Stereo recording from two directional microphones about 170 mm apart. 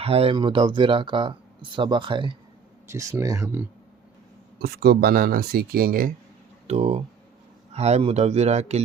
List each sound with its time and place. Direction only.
0.0 s speech: 35° right (ahead or behind)
2.9 s speech: 15° right (ahead or behind)
4.6 s speech: 70° right (ahead or behind); by 6.1 s 55° right (ahead or behind)
6.7 s speech: 40° right (ahead or behind)